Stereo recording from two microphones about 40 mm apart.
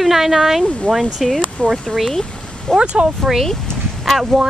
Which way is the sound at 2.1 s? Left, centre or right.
Centre.